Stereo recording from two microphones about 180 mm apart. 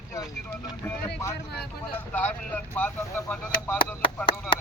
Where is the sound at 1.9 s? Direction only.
10° left (ahead or behind).